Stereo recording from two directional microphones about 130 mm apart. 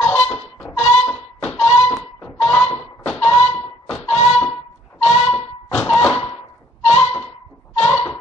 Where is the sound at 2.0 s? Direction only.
Centre (ahead or behind).